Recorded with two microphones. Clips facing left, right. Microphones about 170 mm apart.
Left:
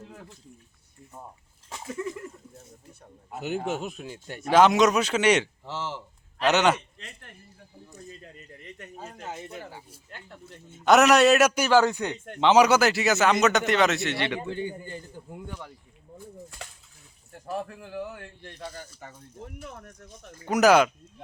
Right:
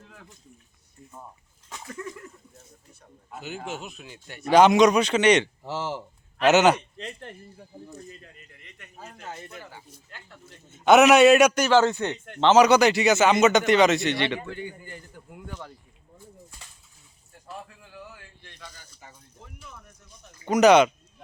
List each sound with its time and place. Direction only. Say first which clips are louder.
1.9 s a sound: left 5 dB; 5° left (ahead or behind)
3.8 s speech: left 6 dB; 45° left (ahead or behind)
4.4 s a man's voice: right 2 dB; centre (ahead or behind)
5.6 s a man's voice: right 4 dB; 10° right (ahead or behind)
7.0 s speech: right 9 dB; 30° right (ahead or behind)
8.2 s speech: left 5 dB; 35° left (ahead or behind)
9.2 s a sound: left 1 dB; 20° left (ahead or behind)
9.5 s a man's voice: left 3 dB; 30° left (ahead or behind)
10.1 s speech: left 6 dB; 55° left (ahead or behind)
10.8 s a man's voice: right 3 dB; centre (ahead or behind)
14.3 s a man's voice: left 3 dB; 25° left (ahead or behind)
16.1 s a sound: left 7 dB; 70° left (ahead or behind)
17.3 s speech: left 8 dB; 65° left (ahead or behind)
20.6 s a man's voice: right 2 dB; 5° left (ahead or behind)